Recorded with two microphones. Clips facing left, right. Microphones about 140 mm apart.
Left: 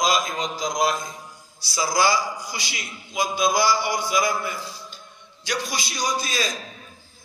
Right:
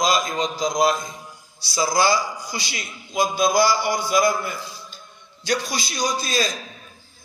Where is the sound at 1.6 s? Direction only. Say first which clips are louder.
Right 2 dB; 25° right (ahead or behind).